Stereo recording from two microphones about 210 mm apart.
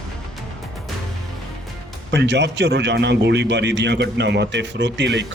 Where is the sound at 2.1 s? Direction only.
55° right (ahead or behind).